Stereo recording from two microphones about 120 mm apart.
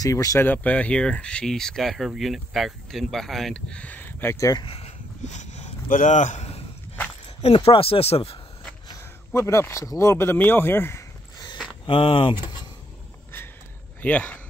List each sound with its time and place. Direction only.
0.0 s speech: 30° left (ahead or behind)
0.5 s speech: 10° left (ahead or behind)
4.6 s a sound: 60° left (ahead or behind)
7.4 s speech: 50° left (ahead or behind)
8.8 s speech: 25° left (ahead or behind)
11.8 s speech: 45° left (ahead or behind)
14.0 s speech: 10° left (ahead or behind)